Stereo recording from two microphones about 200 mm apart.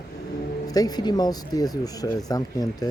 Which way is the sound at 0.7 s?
20° left (ahead or behind).